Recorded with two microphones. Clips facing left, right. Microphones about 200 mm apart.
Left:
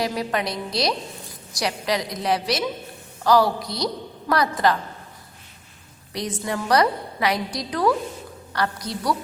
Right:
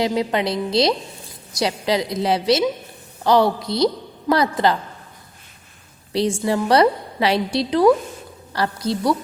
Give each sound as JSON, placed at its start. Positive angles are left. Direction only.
{"t": 0.0, "sound": "a woman's voice", "side_deg": -25}
{"t": 6.1, "sound": "a woman's voice", "side_deg": -30}